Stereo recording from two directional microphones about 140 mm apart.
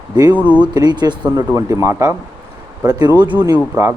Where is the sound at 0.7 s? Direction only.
30° right (ahead or behind).